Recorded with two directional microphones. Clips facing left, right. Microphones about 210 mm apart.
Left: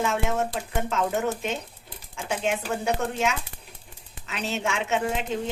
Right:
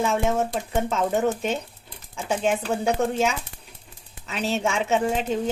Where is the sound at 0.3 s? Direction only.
35° right (ahead or behind).